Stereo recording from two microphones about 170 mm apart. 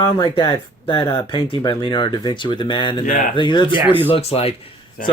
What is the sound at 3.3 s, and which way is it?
A man's voice, 25° left (ahead or behind).